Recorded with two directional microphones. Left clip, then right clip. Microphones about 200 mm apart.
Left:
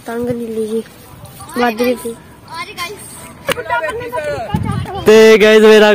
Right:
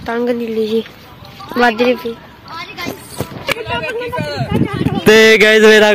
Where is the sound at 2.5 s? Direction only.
30° left (ahead or behind).